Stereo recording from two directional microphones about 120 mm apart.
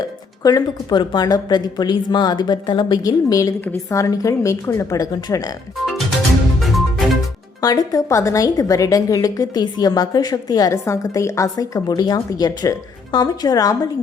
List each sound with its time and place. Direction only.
0.4 s a woman's voice: 35° left (ahead or behind)
6.6 s music: centre (ahead or behind)
7.6 s a woman's voice: 30° left (ahead or behind)